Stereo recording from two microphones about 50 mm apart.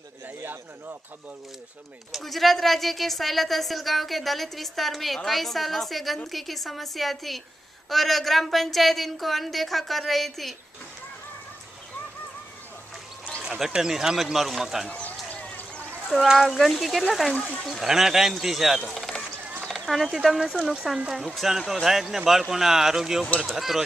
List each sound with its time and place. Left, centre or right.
0.4 s speech: right
2.1 s speech: centre
13.4 s speech: centre
14.9 s a sound: left
16.1 s speech: centre
17.3 s speech: left
17.6 s speech: centre
19.6 s a sound: centre
20.9 s speech: centre